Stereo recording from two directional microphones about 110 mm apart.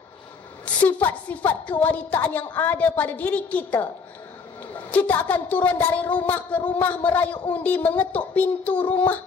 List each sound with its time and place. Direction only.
0.8 s a woman's voice: 15° left (ahead or behind)
4.9 s a woman's voice: 15° left (ahead or behind)